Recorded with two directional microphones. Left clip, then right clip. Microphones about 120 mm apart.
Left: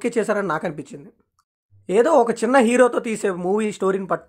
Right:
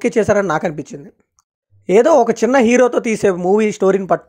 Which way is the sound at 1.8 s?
40° right (ahead or behind).